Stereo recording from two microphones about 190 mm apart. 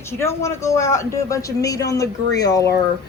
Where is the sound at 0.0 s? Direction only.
15° left (ahead or behind).